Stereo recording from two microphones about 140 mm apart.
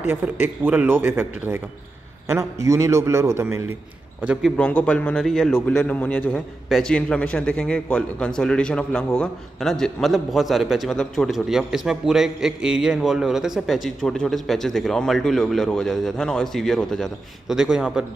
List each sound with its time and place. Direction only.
0.1 s a man's voice: 15° right (ahead or behind)
4.2 s a man's voice: 5° right (ahead or behind)
4.6 s a man's voice: 10° left (ahead or behind)
5.8 s a man's voice: 10° left (ahead or behind); by 18.0 s 5° right (ahead or behind)